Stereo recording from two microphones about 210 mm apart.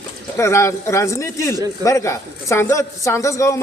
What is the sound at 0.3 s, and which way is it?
Speech, 15° left (ahead or behind).